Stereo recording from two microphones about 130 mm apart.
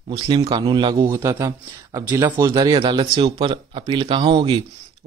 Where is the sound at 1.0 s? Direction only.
20° right (ahead or behind).